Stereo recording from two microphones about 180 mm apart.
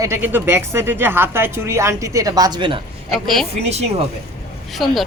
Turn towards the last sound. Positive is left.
turn(degrees=0)  # may be behind; listen again after turning